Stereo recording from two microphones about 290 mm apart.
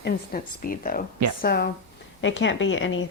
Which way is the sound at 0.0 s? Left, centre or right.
Left.